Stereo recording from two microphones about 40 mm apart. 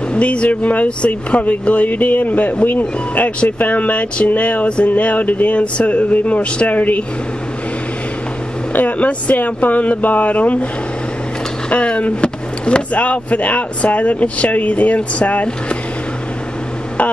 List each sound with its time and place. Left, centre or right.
0.1 s speech: left
3.5 s speech: left
8.7 s speech: left
11.7 s speech: left